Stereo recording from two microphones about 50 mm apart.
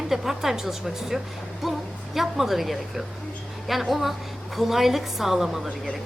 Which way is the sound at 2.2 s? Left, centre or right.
Centre.